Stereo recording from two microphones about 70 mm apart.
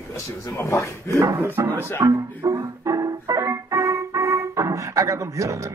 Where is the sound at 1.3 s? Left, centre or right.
Right.